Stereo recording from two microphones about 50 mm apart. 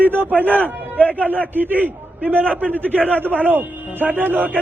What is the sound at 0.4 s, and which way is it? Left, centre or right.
A man's voice, right.